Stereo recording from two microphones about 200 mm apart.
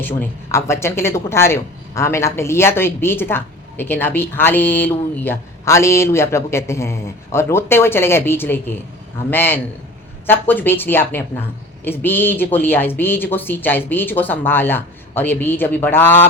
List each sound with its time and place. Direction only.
0.0 s speech: 10° left (ahead or behind)